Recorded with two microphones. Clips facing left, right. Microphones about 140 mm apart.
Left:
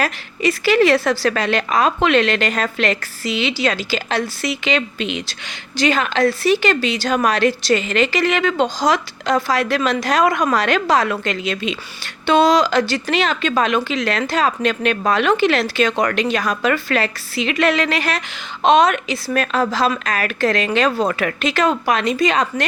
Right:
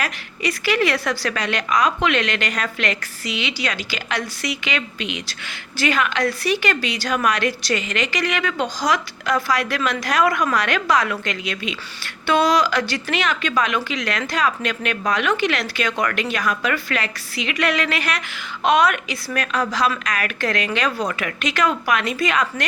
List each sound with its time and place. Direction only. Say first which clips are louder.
0.0 s a woman's voice: left 6 dB; 30° left (ahead or behind)
21.1 s a woman's voice: left 5 dB; 35° left (ahead or behind)